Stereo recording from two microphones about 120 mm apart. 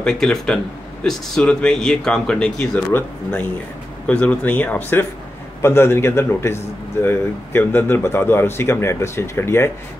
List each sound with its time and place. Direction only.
0.0 s a man's voice: 5° left (ahead or behind); by 9.7 s 20° left (ahead or behind)